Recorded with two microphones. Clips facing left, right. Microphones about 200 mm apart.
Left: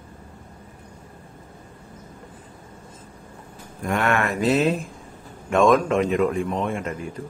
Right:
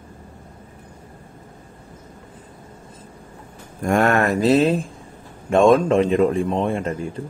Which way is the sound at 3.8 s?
45° right (ahead or behind).